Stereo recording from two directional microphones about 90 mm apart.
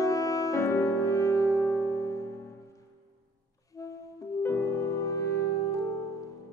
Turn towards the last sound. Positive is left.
turn(degrees=35)  # may be behind; listen again after turning